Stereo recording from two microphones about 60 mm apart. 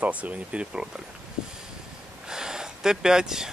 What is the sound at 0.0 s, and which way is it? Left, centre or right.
Speech, right.